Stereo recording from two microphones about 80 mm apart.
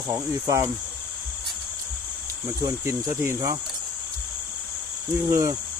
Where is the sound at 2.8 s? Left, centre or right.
Right.